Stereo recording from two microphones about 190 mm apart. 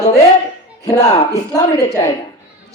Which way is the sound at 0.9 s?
15° left (ahead or behind).